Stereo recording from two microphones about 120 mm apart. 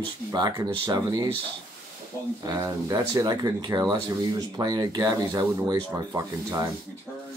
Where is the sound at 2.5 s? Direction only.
25° right (ahead or behind).